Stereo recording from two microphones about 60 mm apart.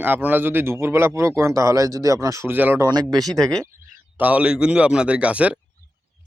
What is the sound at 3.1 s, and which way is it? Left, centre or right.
Speech, right.